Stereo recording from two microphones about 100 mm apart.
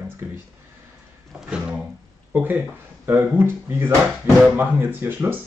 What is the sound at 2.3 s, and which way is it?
Speech, 15° right (ahead or behind).